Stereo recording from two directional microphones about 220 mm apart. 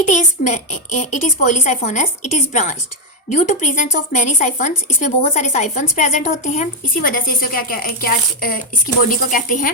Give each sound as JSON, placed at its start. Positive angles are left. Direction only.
{"t": 0.0, "sound": "a woman's voice", "side_deg": 35}